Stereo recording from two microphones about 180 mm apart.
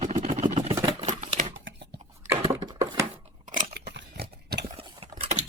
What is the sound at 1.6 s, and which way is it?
Scissors, 80° right.